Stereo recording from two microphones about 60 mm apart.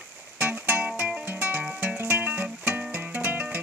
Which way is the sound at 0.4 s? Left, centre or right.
Right.